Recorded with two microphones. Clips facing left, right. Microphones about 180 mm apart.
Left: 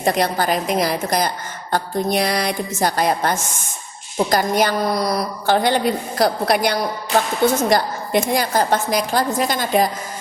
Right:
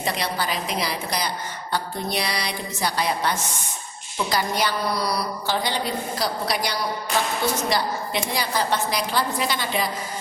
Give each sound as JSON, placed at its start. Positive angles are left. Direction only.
{"t": 0.0, "sound": "a woman's voice", "side_deg": 45}